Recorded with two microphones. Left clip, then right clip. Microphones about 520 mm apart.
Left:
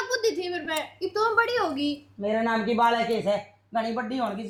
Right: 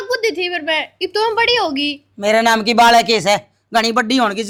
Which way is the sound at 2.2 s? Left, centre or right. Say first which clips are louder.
Right 13 dB; right.